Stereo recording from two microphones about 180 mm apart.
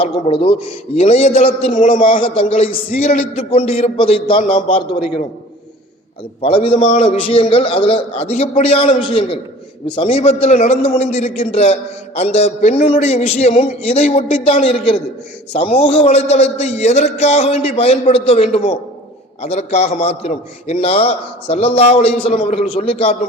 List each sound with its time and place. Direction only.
0.0 s a man's voice: 30° left (ahead or behind)
2.0 s a man's voice: 30° left (ahead or behind)
6.4 s a man's voice: 30° left (ahead or behind)